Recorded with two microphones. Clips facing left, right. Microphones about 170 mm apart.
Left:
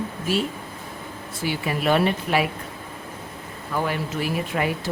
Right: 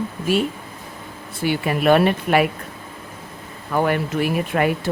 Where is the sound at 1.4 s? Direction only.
55° right (ahead or behind).